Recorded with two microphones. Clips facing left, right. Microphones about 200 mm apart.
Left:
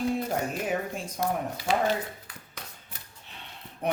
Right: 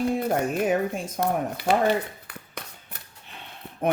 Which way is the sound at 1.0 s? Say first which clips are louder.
Right 4 dB; 55° right (ahead or behind).